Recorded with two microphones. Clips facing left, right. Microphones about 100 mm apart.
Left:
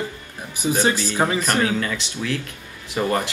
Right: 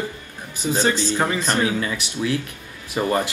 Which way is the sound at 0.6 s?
20° left (ahead or behind).